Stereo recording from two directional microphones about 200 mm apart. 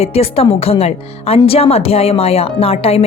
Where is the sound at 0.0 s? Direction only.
30° left (ahead or behind).